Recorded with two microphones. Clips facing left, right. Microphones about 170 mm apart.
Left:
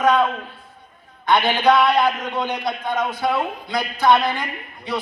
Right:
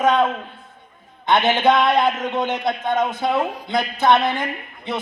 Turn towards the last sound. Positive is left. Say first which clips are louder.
# even
turn(degrees=-20)  # may be behind; listen again after turning